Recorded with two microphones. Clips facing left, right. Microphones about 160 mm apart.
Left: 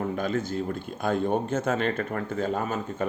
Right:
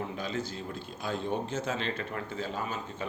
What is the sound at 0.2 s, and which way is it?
Speech, 50° left (ahead or behind).